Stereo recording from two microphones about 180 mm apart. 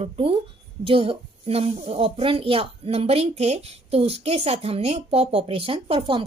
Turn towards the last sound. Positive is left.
turn(degrees=-30)  # may be behind; listen again after turning